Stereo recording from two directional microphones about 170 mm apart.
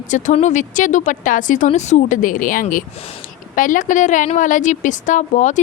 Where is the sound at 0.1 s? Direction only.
50° left (ahead or behind).